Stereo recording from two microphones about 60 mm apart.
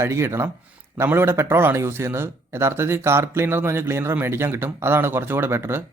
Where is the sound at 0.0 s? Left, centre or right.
Right.